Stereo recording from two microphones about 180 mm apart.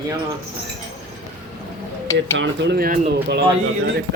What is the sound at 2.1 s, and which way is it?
Speech, 85° right.